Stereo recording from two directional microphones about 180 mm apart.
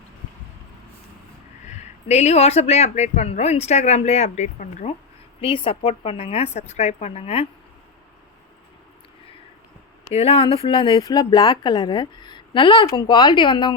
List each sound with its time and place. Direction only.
1.7 s speech: 40° left (ahead or behind)
10.1 s speech: 35° left (ahead or behind)